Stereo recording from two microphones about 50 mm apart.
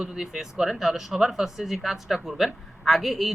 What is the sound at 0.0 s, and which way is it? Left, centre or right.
Speech, centre.